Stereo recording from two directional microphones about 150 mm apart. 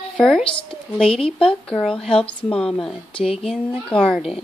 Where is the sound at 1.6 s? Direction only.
5° left (ahead or behind).